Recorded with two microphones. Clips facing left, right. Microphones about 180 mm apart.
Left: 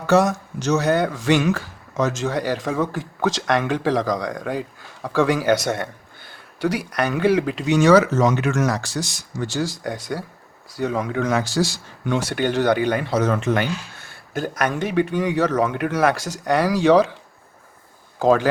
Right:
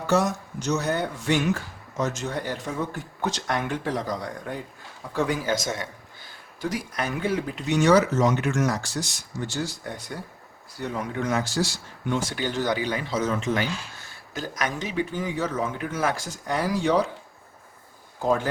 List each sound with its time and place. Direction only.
0.1 s a man's voice: 85° left
18.2 s speech: 90° left